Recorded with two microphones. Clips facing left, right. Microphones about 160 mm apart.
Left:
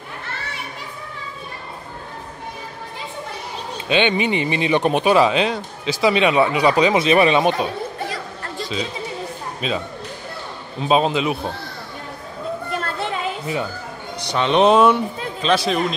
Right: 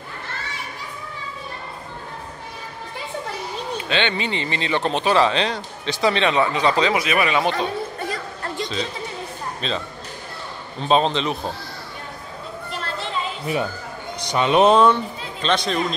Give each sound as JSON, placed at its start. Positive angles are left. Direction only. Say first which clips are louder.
{"t": 3.9, "sound": "speech", "louder": "left 6 dB", "side_deg": 15}
{"t": 7.0, "sound": "speech", "louder": "left 6 dB", "side_deg": 25}
{"t": 9.6, "sound": "speech", "louder": "left 4 dB", "side_deg": 10}
{"t": 12.7, "sound": "a sound", "louder": "even", "side_deg": 55}
{"t": 14.2, "sound": "speech", "louder": "even", "side_deg": -10}